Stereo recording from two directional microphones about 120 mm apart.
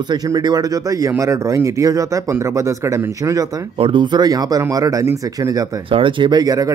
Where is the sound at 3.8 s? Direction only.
45° right (ahead or behind).